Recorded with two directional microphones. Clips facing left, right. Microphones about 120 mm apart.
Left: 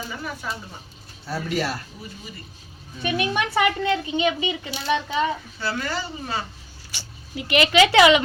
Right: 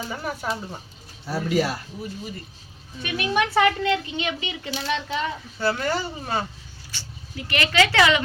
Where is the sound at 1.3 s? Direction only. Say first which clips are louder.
Right 3 dB; 15° right (ahead or behind).